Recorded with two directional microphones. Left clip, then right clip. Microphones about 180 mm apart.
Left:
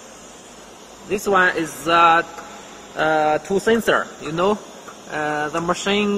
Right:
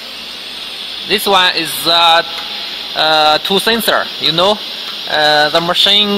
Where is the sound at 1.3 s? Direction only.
25° right (ahead or behind).